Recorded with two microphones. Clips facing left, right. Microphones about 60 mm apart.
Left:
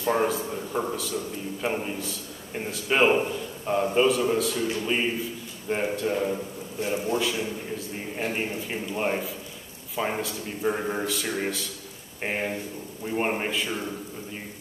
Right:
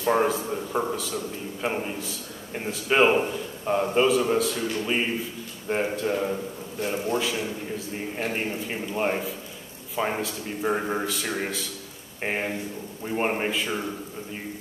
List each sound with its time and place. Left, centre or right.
0.0 s a man's voice: centre